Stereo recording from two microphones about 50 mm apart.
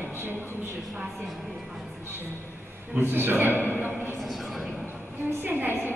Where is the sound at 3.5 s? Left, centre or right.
Left.